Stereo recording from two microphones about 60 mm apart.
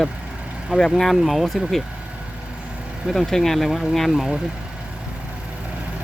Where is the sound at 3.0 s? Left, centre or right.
Centre.